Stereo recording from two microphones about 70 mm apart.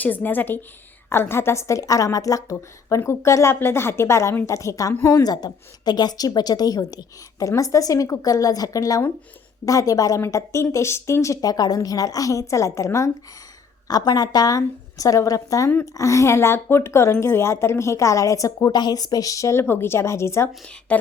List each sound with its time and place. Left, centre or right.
0.0 s a woman's voice: left
5.2 s a woman's voice: left
10.3 s a woman's voice: left
13.8 s a woman's voice: left
18.7 s a woman's voice: left
19.5 s a woman's voice: left
20.9 s speech: centre